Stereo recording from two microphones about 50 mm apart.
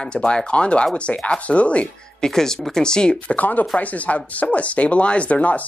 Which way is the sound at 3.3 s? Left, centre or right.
Left.